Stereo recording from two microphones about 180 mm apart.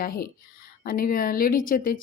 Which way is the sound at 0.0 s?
55° left (ahead or behind).